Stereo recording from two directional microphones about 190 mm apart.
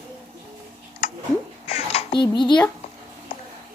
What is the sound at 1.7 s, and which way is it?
Babbling, 35° left (ahead or behind).